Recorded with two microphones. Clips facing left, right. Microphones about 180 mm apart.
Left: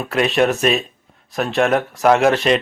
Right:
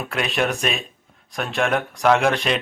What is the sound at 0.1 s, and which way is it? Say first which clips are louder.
Speech: left 7 dB; centre (ahead or behind).